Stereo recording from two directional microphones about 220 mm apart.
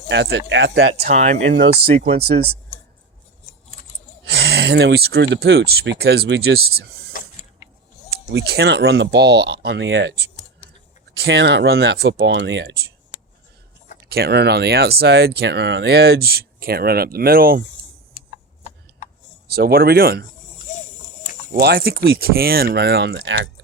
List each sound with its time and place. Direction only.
0.1 s speech: 55° right (ahead or behind)
1.1 s speech: 30° right (ahead or behind)
4.3 s speech: 45° right (ahead or behind)
7.1 s mechanisms: 40° left (ahead or behind)
8.1 s speech: 50° right (ahead or behind)
11.2 s speech: 50° right (ahead or behind)
14.1 s speech: 45° right (ahead or behind)
19.5 s speech: 45° right (ahead or behind)
21.5 s speech: 45° right (ahead or behind)